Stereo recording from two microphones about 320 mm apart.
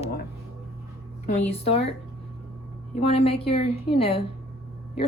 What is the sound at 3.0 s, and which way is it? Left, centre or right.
Speech, centre.